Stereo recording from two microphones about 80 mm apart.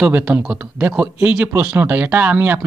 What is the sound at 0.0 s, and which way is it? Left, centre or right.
A man's voice, centre.